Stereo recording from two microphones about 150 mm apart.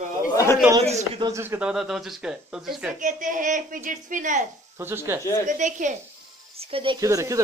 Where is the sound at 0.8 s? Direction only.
45° right (ahead or behind).